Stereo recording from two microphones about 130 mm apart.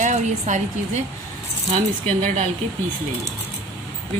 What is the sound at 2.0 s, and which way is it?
Speech, 75° right (ahead or behind).